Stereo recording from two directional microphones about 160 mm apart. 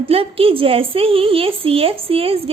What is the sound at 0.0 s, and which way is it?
A woman's voice, 35° right (ahead or behind).